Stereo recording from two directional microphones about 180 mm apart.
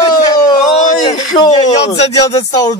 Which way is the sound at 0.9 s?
40° left (ahead or behind).